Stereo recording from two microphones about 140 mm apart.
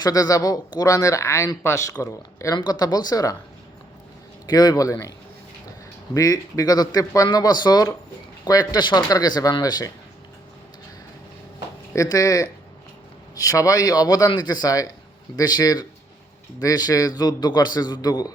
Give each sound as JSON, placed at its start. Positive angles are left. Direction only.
{"t": 0.0, "sound": "speech", "side_deg": 25}
{"t": 4.4, "sound": "speech", "side_deg": 30}
{"t": 6.1, "sound": "speech", "side_deg": 25}
{"t": 11.9, "sound": "speech", "side_deg": 25}